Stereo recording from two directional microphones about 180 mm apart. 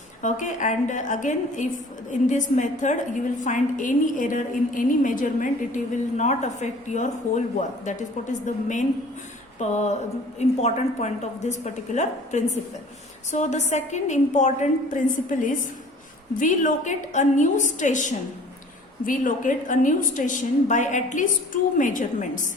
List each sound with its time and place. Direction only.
0.2 s a woman's voice: 45° left (ahead or behind)